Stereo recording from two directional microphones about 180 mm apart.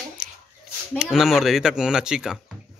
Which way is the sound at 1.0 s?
Centre (ahead or behind).